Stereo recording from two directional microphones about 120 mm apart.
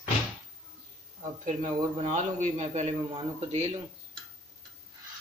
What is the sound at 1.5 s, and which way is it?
A man's voice, 70° right (ahead or behind).